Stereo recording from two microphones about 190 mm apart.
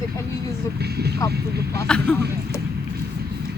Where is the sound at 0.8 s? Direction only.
60° right (ahead or behind).